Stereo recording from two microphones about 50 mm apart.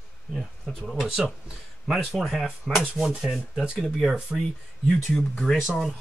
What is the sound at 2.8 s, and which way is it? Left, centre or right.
Sanding, centre.